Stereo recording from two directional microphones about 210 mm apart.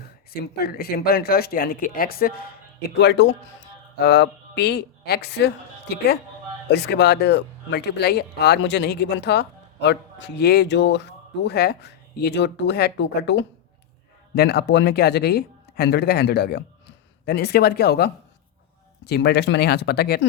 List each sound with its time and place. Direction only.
0.3 s speech: 45° left (ahead or behind)
2.9 s a man's voice: 55° left (ahead or behind)